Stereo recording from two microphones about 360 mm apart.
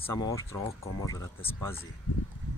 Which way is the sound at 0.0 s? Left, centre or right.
Centre.